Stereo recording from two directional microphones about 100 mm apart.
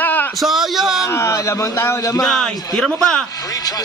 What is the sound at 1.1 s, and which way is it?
A man's voice, 30° left (ahead or behind).